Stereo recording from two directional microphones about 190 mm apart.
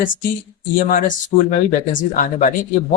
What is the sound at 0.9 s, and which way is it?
Speech, 45° left (ahead or behind).